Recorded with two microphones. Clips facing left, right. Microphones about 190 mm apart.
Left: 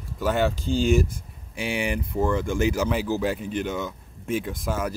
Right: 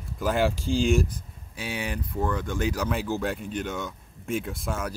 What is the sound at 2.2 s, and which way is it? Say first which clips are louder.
Speech: left 4 dB; 10° left (ahead or behind).